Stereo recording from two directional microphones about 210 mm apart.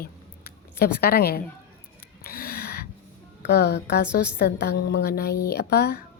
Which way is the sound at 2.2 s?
45° left (ahead or behind).